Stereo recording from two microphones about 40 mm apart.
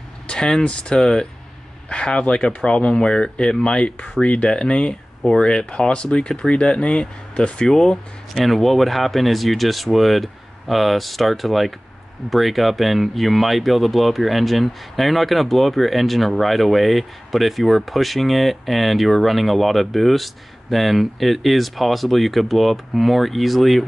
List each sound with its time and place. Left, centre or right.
0.3 s speech: centre
8.5 s speech: centre